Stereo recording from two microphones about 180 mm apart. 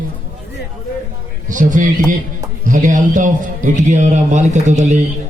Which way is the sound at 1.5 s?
45° right (ahead or behind).